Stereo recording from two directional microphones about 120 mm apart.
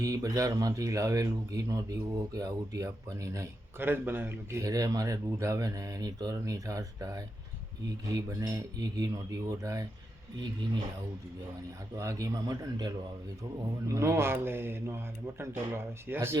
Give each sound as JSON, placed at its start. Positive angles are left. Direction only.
{"t": 0.0, "sound": "speech", "side_deg": -30}
{"t": 11.9, "sound": "speech", "side_deg": -25}